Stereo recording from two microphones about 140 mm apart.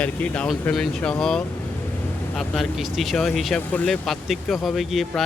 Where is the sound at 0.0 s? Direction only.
10° left (ahead or behind).